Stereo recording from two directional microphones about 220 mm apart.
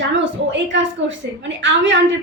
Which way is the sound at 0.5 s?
55° right (ahead or behind).